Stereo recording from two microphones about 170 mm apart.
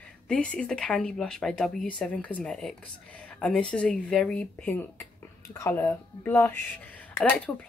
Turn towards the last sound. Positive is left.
turn(degrees=10)  # may be behind; listen again after turning